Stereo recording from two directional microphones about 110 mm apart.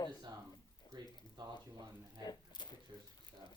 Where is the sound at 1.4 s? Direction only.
45° right (ahead or behind).